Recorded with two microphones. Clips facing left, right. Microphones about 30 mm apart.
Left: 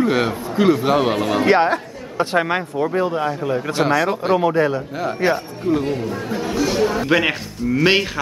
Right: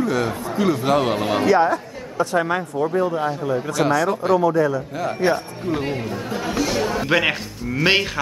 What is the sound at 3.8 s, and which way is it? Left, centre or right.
Speech, left.